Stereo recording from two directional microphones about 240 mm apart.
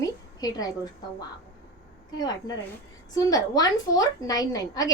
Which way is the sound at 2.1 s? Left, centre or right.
Centre.